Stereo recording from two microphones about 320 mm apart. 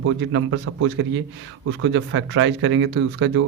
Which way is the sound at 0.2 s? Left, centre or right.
Right.